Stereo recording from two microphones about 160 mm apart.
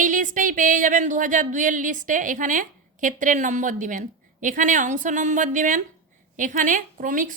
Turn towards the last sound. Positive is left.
turn(degrees=-55)  # may be behind; listen again after turning